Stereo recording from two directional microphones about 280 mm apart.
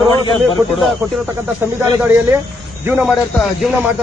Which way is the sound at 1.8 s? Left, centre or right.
Centre.